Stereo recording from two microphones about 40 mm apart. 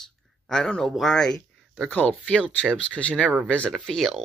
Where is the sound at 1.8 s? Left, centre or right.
Left.